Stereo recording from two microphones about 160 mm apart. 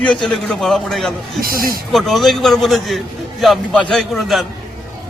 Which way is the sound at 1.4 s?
65° right (ahead or behind).